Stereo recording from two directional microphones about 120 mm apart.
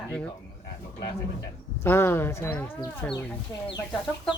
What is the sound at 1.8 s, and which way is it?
Speech, 20° left (ahead or behind).